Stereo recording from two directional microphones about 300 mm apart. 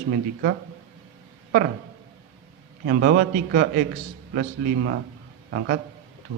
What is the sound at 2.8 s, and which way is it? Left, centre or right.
A man's voice, right.